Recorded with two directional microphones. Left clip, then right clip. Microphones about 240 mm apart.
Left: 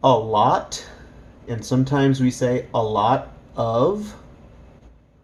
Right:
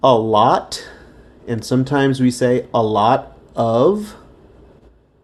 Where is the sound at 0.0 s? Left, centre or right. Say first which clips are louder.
Right 4 dB; right.